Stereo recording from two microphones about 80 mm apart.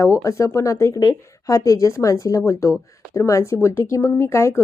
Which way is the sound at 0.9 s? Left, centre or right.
Left.